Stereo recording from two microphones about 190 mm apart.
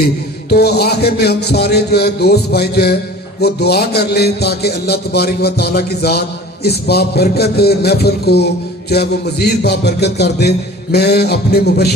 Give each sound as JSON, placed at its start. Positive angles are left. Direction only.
{"t": 0.5, "sound": "a man's voice", "side_deg": 60}